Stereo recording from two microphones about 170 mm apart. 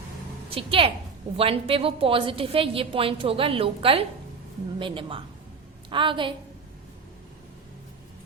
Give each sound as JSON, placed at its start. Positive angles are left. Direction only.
{"t": 0.5, "sound": "a woman's voice", "side_deg": -30}